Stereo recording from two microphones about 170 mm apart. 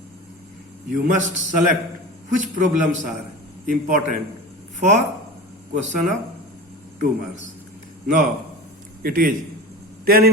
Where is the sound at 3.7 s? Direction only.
50° right (ahead or behind).